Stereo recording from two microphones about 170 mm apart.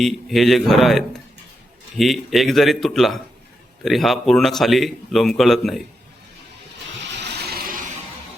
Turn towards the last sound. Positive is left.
turn(degrees=-65)  # may be behind; listen again after turning